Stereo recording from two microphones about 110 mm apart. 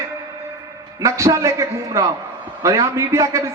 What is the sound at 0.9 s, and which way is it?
A man's voice, 30° right (ahead or behind).